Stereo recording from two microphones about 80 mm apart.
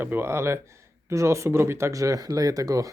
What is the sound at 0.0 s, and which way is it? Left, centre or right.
Speech, right.